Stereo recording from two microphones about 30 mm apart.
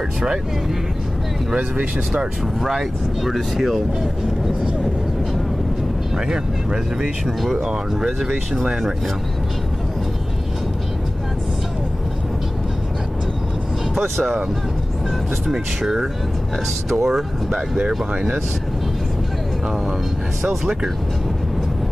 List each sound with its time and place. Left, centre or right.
2.6 s speech: centre
6.1 s speech: centre
13.9 s speech: centre
15.5 s speech: centre